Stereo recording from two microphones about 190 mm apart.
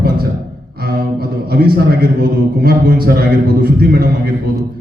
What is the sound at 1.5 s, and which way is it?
A man's voice, 55° right (ahead or behind).